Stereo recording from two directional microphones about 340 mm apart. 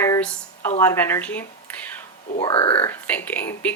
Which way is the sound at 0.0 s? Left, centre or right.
Centre.